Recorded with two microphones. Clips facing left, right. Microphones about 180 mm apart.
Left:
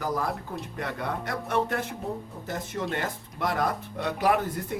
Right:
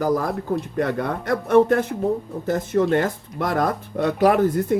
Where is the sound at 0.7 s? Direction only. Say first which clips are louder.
Right 6 dB; 45° right (ahead or behind).